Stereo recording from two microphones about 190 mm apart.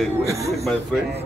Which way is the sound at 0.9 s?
5° left (ahead or behind).